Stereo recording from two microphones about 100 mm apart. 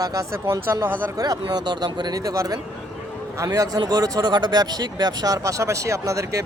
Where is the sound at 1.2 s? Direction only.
40° right (ahead or behind).